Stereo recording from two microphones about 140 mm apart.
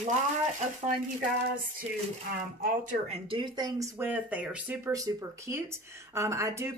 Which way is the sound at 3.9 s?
10° right (ahead or behind).